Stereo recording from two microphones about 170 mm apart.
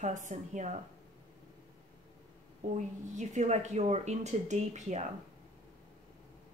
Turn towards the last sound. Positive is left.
turn(degrees=-45)  # may be behind; listen again after turning